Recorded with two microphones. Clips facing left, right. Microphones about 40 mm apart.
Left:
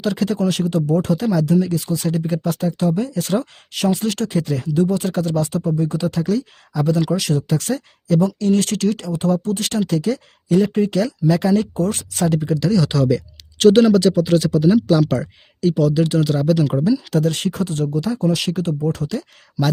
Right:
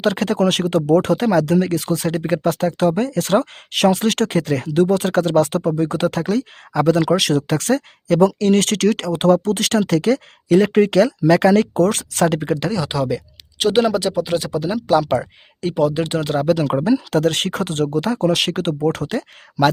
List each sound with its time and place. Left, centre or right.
0.0 s speech: right
12.7 s speech: centre
15.7 s speech: right